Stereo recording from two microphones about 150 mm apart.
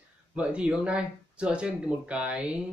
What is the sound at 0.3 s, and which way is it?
Speech, 5° right (ahead or behind).